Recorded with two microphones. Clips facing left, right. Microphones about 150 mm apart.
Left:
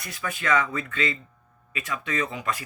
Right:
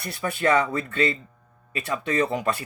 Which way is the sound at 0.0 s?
35° right (ahead or behind).